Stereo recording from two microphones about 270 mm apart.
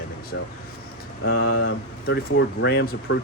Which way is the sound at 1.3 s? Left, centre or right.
Left.